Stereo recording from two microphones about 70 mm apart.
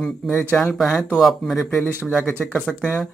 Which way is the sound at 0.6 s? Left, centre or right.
Centre.